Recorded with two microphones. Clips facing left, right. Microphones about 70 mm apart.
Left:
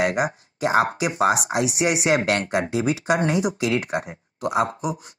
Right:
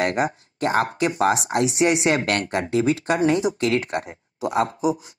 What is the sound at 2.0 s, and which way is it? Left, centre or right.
Speech, left.